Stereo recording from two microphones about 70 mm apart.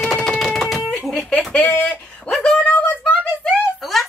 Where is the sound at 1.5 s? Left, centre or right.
Left.